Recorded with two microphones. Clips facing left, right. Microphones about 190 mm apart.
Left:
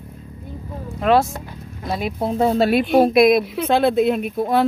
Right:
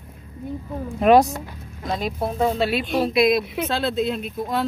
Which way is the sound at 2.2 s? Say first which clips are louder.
Left 5 dB; 35° left (ahead or behind).